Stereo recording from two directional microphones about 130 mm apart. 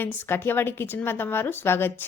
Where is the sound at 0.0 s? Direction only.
15° left (ahead or behind).